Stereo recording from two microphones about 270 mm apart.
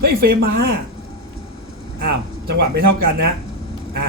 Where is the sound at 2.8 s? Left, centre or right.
Right.